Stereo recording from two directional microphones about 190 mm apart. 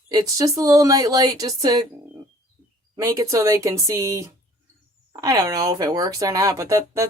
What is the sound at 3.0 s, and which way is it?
Speech, 15° right (ahead or behind).